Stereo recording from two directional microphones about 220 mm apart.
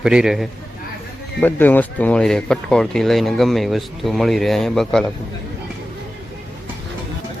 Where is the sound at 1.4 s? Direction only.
10° left (ahead or behind).